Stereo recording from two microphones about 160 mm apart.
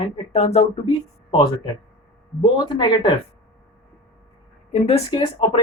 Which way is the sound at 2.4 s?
30° left (ahead or behind).